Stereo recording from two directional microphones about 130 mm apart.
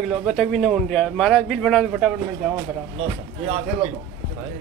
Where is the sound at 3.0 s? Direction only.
50° right (ahead or behind).